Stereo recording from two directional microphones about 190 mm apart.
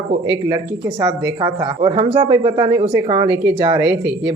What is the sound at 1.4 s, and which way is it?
Speech, 25° right (ahead or behind).